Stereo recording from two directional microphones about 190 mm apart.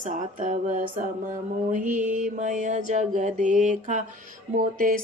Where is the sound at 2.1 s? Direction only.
40° right (ahead or behind).